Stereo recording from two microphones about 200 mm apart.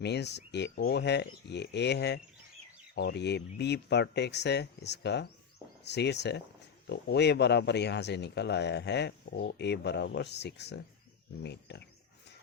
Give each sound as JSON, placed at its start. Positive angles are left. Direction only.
{"t": 0.0, "sound": "speech", "side_deg": 55}